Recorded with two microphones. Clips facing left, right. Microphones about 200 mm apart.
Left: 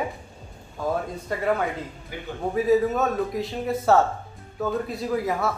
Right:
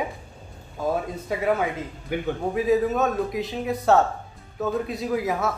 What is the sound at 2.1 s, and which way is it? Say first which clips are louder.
Speech: right 11 dB; 60° right (ahead or behind).